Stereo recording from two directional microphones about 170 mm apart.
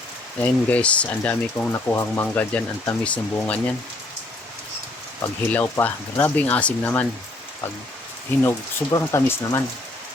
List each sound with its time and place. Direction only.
0.4 s speech: 10° left (ahead or behind)
5.2 s speech: 10° left (ahead or behind)
8.4 s speech: 15° left (ahead or behind)